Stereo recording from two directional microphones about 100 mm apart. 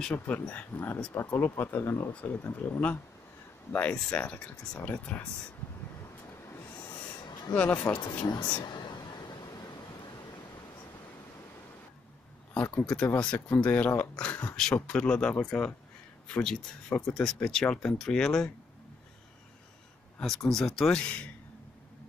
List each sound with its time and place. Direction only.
0.1 s speech: 15° left (ahead or behind)
7.5 s speech: 15° left (ahead or behind)
8.3 s speech: 45° left (ahead or behind)
8.5 s a sound: 45° left (ahead or behind)
12.8 s speech: 10° left (ahead or behind)
20.4 s speech: 5° left (ahead or behind)